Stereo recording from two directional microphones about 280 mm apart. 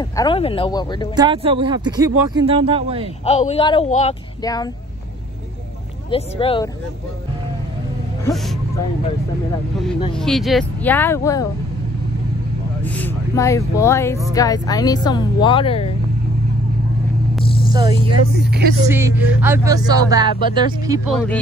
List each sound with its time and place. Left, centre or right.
0.1 s speech: centre
1.1 s speech: centre
3.3 s speech: left
6.0 s speech: centre
10.1 s speech: centre
12.8 s speech: centre
17.5 s vehicle: centre
17.7 s speech: centre
18.3 s speech: right
18.9 s speech: centre